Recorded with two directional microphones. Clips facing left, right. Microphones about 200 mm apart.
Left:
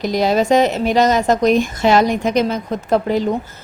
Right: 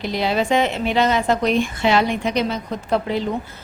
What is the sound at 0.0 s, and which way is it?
A woman's voice, 40° left (ahead or behind).